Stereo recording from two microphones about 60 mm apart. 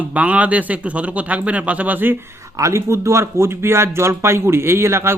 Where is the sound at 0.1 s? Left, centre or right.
Right.